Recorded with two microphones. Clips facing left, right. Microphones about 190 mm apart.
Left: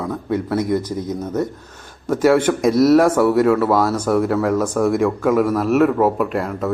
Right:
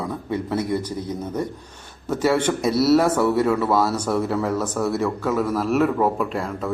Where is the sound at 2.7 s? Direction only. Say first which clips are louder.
Left 5 dB; 10° right (ahead or behind).